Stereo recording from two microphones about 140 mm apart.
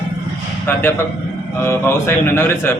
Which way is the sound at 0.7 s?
15° left (ahead or behind).